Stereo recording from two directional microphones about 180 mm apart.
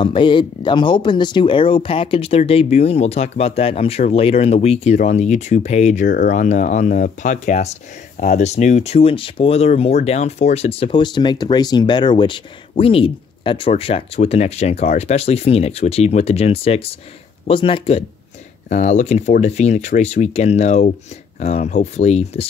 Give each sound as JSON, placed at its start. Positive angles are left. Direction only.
{"t": 0.0, "sound": "speech", "side_deg": 25}